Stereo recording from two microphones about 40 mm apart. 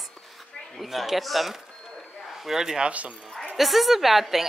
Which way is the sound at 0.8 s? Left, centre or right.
Centre.